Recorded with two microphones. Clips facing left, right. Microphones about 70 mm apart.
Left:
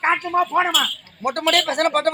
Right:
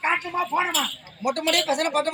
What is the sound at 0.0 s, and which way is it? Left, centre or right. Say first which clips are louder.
Speech: left 5 dB; left.